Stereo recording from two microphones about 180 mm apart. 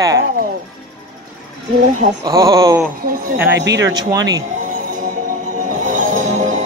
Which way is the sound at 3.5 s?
75° right (ahead or behind).